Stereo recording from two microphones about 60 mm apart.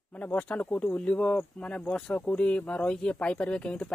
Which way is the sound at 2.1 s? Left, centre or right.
Left.